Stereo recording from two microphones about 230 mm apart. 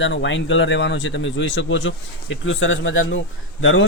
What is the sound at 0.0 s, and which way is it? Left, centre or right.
Speech, left.